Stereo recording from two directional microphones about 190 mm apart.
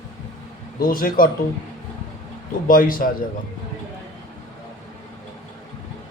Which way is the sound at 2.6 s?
45° left (ahead or behind).